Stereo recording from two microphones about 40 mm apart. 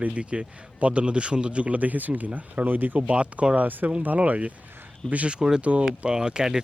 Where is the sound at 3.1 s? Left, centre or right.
Right.